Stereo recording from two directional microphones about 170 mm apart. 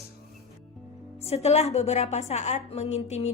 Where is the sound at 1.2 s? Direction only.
35° left (ahead or behind).